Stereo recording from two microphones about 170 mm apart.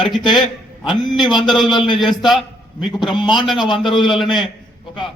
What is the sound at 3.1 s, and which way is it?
Speech, 25° left (ahead or behind).